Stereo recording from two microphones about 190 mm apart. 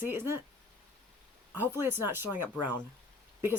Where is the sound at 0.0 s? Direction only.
10° right (ahead or behind).